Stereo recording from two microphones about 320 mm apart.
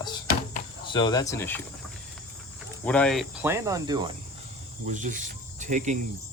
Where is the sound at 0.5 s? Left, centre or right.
Centre.